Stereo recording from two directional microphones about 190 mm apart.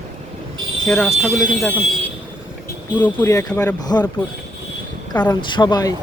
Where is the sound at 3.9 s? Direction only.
20° left (ahead or behind).